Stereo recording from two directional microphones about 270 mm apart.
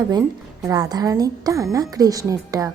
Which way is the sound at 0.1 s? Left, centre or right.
Centre.